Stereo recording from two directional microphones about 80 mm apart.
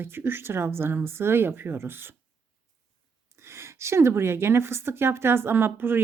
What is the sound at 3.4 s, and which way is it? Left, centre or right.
A woman's voice, right.